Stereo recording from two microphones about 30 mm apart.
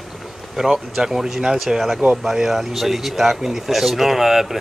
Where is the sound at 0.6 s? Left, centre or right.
Centre.